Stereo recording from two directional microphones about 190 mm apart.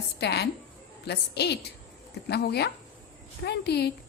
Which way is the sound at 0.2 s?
60° left (ahead or behind).